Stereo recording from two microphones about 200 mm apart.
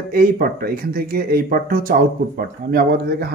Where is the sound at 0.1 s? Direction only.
50° right (ahead or behind).